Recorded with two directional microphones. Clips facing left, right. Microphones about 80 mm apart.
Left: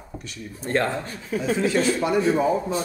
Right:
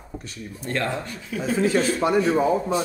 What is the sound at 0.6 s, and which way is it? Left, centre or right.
Speech, left.